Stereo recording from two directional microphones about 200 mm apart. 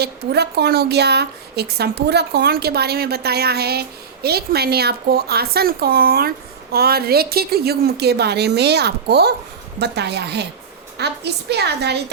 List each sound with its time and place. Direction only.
0.0 s a woman's voice: 55° right (ahead or behind)